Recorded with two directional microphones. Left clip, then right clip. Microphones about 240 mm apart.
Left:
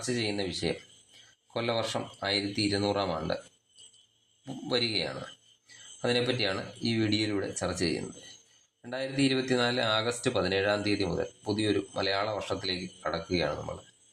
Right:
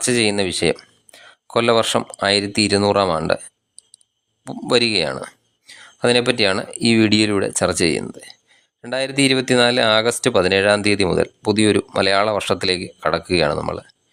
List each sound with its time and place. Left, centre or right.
0.0 s speech: right
4.4 s speech: right